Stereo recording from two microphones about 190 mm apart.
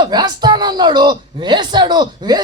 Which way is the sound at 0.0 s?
20° right (ahead or behind).